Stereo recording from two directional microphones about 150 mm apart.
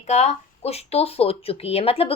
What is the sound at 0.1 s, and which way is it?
Speech, 45° left (ahead or behind).